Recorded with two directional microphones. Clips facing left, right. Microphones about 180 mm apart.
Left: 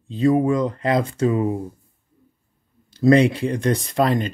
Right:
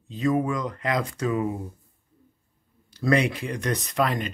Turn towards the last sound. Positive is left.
turn(degrees=30)  # may be behind; listen again after turning